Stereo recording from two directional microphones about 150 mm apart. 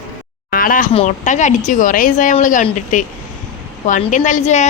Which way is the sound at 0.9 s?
55° left (ahead or behind).